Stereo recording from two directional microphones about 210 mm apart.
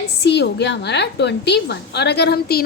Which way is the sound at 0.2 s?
55° left (ahead or behind).